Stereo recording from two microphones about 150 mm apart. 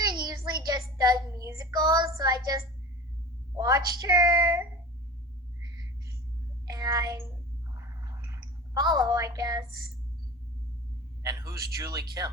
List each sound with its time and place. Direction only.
0.0 s child singing: 30° right (ahead or behind)
3.5 s a sound: 25° right (ahead or behind)
6.7 s child singing: 25° right (ahead or behind)
7.8 s clicking: 20° right (ahead or behind)
11.2 s speech: 25° right (ahead or behind)